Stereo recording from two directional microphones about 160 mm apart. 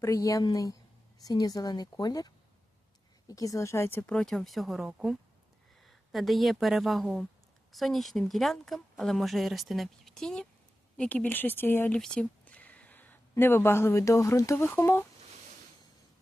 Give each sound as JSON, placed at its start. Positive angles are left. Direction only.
{"t": 0.0, "sound": "a woman's voice", "side_deg": 20}